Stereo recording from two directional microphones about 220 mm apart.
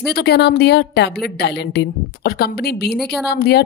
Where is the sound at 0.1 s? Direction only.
45° left (ahead or behind).